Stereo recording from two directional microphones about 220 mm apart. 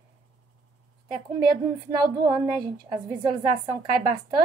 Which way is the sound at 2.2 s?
15° right (ahead or behind).